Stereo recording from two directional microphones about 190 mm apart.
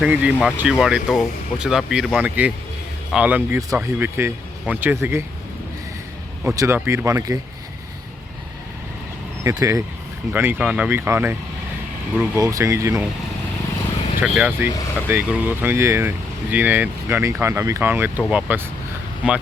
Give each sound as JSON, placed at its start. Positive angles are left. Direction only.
{"t": 0.0, "sound": "speech", "side_deg": -5}
{"t": 6.4, "sound": "speech", "side_deg": -15}
{"t": 9.4, "sound": "speech", "side_deg": -15}
{"t": 14.2, "sound": "speech", "side_deg": -10}